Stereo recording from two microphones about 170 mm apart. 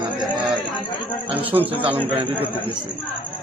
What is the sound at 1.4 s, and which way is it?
Speech, 10° right (ahead or behind).